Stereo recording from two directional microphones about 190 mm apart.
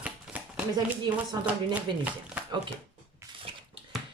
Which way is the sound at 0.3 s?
Centre (ahead or behind).